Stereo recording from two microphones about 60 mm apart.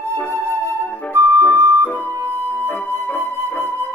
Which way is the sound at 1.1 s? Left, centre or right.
Right.